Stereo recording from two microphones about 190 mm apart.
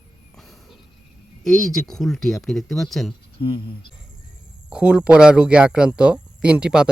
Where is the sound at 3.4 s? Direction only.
25° left (ahead or behind).